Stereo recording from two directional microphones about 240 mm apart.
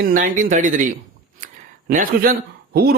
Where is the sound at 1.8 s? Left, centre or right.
Right.